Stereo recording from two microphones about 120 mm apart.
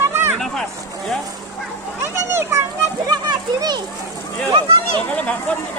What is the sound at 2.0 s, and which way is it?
Children playing, 20° right (ahead or behind).